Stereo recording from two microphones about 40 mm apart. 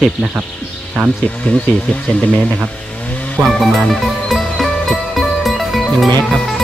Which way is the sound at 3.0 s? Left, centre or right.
Left.